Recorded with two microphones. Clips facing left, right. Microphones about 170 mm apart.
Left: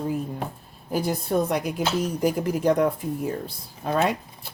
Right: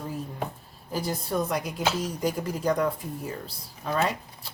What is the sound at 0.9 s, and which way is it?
A woman's voice, 55° left (ahead or behind).